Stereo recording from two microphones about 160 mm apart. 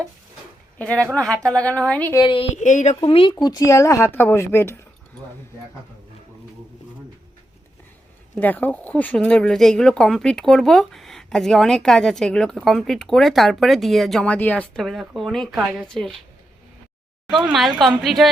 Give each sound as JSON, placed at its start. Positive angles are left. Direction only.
{"t": 0.8, "sound": "a woman's voice", "side_deg": 5}
{"t": 2.1, "sound": "speech", "side_deg": 30}
{"t": 2.5, "sound": "speech", "side_deg": 50}
{"t": 2.9, "sound": "a woman's voice", "side_deg": 35}
{"t": 8.4, "sound": "speech", "side_deg": 10}
{"t": 17.3, "sound": "speech", "side_deg": 0}